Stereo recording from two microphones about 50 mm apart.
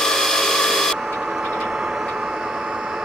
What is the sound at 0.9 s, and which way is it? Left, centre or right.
Vehicle, centre.